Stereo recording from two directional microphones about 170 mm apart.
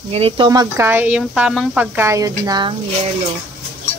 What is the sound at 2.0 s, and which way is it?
Speech, 20° right (ahead or behind).